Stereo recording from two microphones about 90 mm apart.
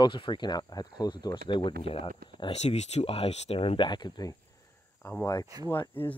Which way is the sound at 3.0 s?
90° left.